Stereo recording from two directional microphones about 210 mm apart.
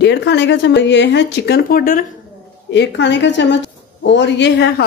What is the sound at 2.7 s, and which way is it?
Speech, 55° left (ahead or behind).